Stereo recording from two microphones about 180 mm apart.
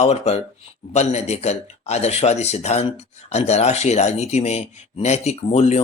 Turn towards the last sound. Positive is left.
turn(degrees=35)  # may be behind; listen again after turning